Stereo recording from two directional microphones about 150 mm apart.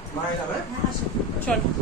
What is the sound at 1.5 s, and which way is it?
Speech, 10° left (ahead or behind).